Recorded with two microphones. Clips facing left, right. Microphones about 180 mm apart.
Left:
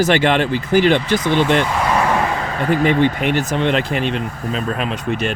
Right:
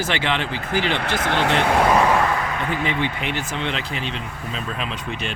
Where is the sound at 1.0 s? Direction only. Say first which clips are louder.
Left 5 dB; 65° right (ahead or behind).